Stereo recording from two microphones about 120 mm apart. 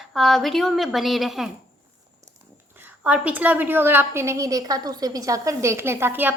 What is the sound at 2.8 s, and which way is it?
A woman's voice, 15° right (ahead or behind).